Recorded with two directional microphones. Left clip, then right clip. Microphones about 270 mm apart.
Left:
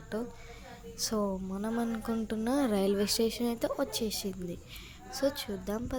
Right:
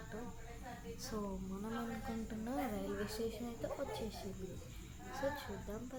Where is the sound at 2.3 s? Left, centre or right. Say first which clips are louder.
Left 12 dB; left.